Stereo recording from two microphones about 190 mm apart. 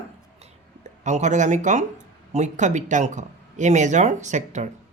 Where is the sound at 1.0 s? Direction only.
40° right (ahead or behind).